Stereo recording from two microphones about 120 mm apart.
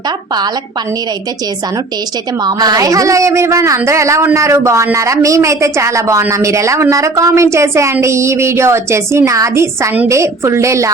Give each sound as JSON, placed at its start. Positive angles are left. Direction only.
{"t": 2.4, "sound": "speech", "side_deg": -35}